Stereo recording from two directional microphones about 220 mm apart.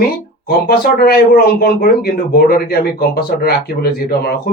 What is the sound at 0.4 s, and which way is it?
Speech, 40° left (ahead or behind).